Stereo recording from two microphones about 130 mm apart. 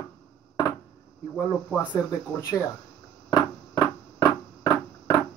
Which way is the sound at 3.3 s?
25° left (ahead or behind).